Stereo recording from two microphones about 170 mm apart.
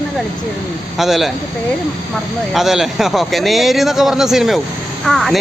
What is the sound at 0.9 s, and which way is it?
Speech, centre (ahead or behind).